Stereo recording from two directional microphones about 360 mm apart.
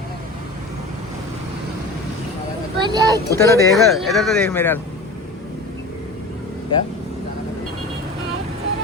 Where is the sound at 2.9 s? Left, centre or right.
Centre.